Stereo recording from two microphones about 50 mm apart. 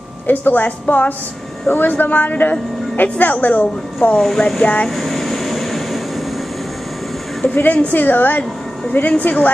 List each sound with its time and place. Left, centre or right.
0.3 s a woman's voice: left
4.2 s speech: centre
4.8 s air conditioning: centre
7.4 s a woman's voice: left